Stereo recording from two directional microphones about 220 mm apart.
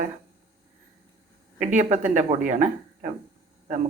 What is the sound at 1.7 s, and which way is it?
Speech, 30° right (ahead or behind).